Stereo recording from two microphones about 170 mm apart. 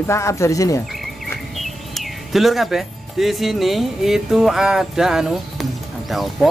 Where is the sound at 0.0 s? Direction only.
15° left (ahead or behind).